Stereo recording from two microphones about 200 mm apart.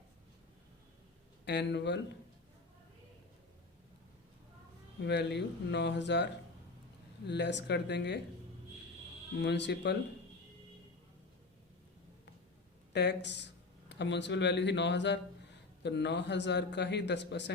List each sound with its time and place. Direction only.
1.5 s a man's voice: 60° left (ahead or behind)
5.0 s a man's voice: 55° left (ahead or behind)
7.3 s a man's voice: 60° left (ahead or behind)
9.4 s a man's voice: 60° left (ahead or behind)
12.9 s a man's voice: 60° left (ahead or behind)